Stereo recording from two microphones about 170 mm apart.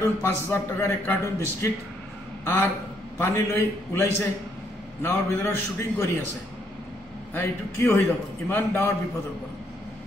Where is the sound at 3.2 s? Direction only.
15° left (ahead or behind).